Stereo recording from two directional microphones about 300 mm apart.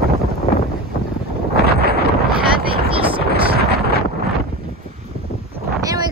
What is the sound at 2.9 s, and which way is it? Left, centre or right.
Vehicle, centre.